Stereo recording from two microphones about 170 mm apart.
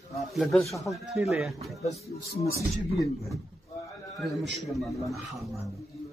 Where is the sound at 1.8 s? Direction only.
40° left (ahead or behind).